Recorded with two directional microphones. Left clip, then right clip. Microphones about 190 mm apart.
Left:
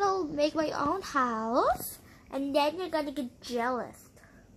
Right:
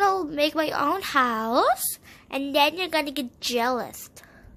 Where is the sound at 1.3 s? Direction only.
15° right (ahead or behind).